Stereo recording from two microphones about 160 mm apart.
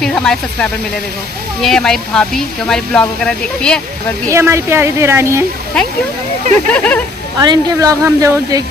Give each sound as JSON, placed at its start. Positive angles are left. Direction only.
{"t": 0.0, "sound": "speech", "side_deg": 5}
{"t": 4.3, "sound": "a woman's voice", "side_deg": -15}
{"t": 5.7, "sound": "speech", "side_deg": 5}
{"t": 7.3, "sound": "a woman's voice", "side_deg": -20}